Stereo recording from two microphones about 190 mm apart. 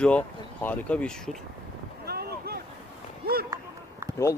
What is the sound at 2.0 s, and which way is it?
Boat, 55° right (ahead or behind).